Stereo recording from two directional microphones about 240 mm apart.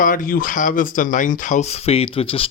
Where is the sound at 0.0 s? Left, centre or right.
Left.